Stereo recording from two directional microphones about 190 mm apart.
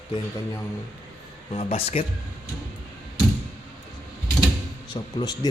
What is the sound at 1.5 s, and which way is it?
Speech, 30° left (ahead or behind).